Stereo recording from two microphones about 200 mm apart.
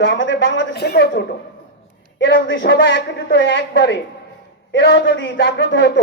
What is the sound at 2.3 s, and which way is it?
A man's voice, 65° left (ahead or behind).